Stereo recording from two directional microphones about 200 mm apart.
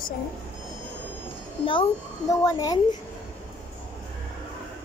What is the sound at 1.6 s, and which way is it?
A child's voice, 25° left (ahead or behind).